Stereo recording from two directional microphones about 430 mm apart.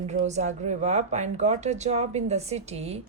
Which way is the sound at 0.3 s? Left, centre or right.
Centre.